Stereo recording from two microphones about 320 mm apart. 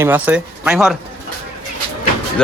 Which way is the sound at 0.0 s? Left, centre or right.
Centre.